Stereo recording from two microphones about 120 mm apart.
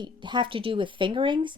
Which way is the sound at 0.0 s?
40° right (ahead or behind).